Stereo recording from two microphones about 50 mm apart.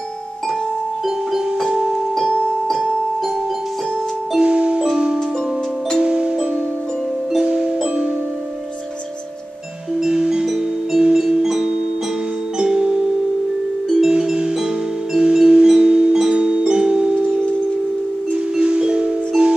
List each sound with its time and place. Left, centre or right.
1.0 s music: centre
1.7 s keyboard: centre
4.4 s music: right
9.9 s music: centre
10.4 s music: centre
11.0 s music: centre
14.0 s music: centre
18.6 s music: right